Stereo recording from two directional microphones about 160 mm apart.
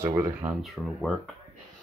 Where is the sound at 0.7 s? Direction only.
Centre (ahead or behind).